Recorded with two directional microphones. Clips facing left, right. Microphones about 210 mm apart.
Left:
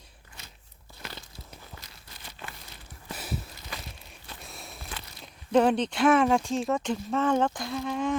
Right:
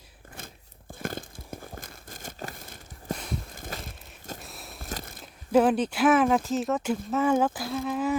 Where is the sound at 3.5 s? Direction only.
50° right (ahead or behind).